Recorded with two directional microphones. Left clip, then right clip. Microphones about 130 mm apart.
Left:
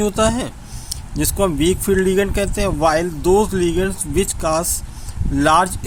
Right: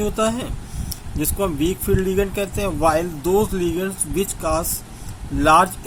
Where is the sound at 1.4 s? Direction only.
90° left.